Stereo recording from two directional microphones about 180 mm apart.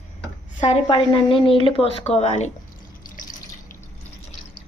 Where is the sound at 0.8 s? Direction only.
25° left (ahead or behind).